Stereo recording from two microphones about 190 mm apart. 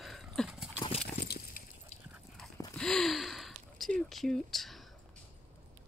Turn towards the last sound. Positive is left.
turn(degrees=0)  # may be behind; listen again after turning